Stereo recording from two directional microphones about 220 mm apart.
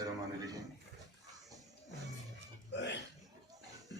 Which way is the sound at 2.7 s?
55° left (ahead or behind).